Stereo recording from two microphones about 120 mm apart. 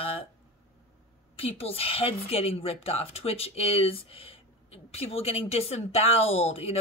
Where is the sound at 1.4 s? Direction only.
55° left (ahead or behind).